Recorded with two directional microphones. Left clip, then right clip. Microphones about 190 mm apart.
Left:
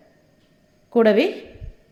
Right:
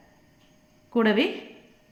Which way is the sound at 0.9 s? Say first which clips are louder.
Left 7 dB; 20° left (ahead or behind).